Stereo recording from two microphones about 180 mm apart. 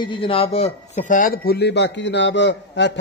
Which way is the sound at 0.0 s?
30° left (ahead or behind).